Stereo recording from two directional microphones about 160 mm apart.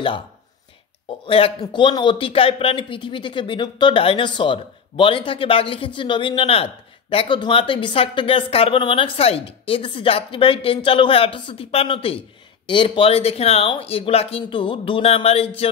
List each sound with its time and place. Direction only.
1.2 s a man's voice: 35° left (ahead or behind)